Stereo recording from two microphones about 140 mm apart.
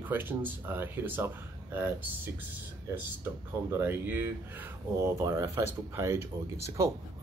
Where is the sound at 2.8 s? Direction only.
20° right (ahead or behind).